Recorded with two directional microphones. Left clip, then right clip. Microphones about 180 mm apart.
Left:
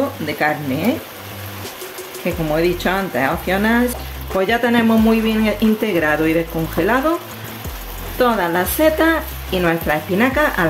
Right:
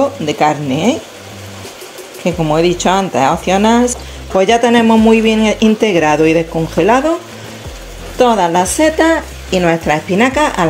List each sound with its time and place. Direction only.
0.3 s speech: 30° right (ahead or behind)
2.5 s speech: 30° right (ahead or behind)
8.2 s speech: 25° right (ahead or behind)